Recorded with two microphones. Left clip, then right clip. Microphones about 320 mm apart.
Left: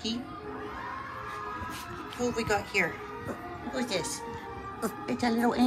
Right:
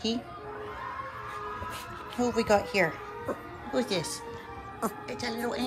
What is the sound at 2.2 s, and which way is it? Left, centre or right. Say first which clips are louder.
Speech: right 4 dB; centre.